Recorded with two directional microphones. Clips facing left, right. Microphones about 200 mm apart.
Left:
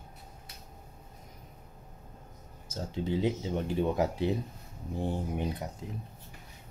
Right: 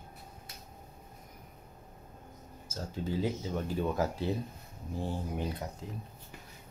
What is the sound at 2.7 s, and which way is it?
Speech, 20° left (ahead or behind).